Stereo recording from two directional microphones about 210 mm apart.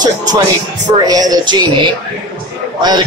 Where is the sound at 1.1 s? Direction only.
20° right (ahead or behind).